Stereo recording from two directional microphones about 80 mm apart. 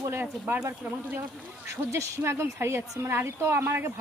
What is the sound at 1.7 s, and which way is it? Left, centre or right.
A woman's voice, right.